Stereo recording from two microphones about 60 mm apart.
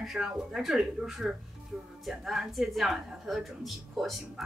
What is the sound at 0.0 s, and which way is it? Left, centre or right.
Speech, centre.